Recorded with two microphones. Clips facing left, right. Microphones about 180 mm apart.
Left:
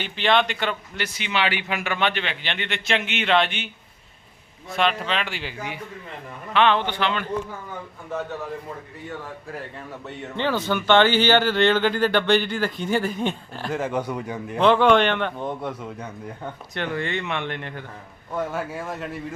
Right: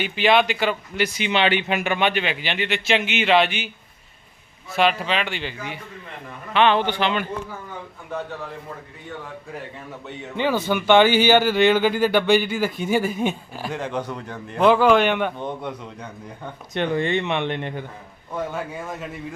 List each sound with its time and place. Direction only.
0.0 s speech: 10° right (ahead or behind)
4.7 s a man's voice: 5° right (ahead or behind)
6.5 s a man's voice: 5° right (ahead or behind)
9.7 s a man's voice: centre (ahead or behind)
10.3 s speech: 10° right (ahead or behind)
13.7 s a man's voice: 5° left (ahead or behind)
14.6 s speech: 5° right (ahead or behind)
15.4 s a man's voice: centre (ahead or behind)
16.7 s speech: 20° right (ahead or behind)
18.3 s a man's voice: centre (ahead or behind)